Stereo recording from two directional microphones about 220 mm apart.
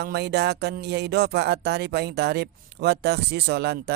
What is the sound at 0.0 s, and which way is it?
Speech, 45° right (ahead or behind).